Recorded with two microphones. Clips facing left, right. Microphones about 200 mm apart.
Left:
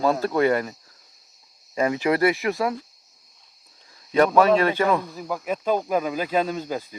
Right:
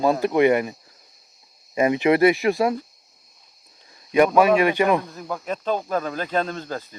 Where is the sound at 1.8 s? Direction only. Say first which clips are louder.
Right 4 dB; 20° right (ahead or behind).